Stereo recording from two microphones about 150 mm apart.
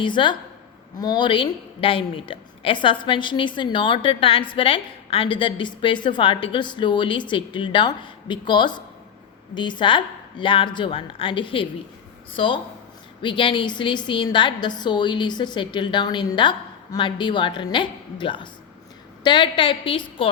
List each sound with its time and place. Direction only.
0.0 s a woman's voice: 30° left (ahead or behind)
13.2 s a woman's voice: 35° left (ahead or behind)